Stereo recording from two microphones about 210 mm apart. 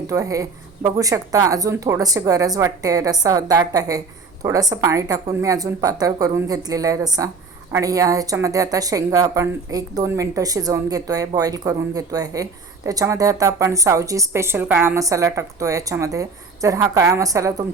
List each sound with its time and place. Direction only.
0.1 s a woman's voice: 15° right (ahead or behind)